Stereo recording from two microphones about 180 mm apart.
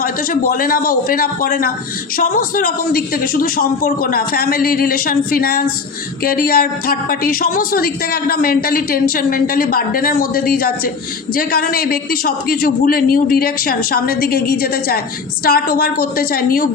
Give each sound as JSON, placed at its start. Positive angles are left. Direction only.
{"t": 0.0, "sound": "a man's voice", "side_deg": 50}